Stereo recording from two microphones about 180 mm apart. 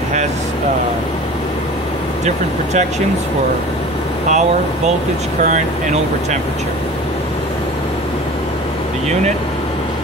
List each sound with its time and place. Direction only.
4.3 s speech: 40° right (ahead or behind)